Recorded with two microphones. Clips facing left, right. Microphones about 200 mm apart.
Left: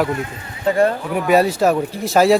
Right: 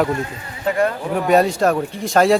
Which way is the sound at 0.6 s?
30° left (ahead or behind).